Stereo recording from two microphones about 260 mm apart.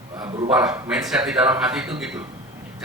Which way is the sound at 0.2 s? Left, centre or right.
Centre.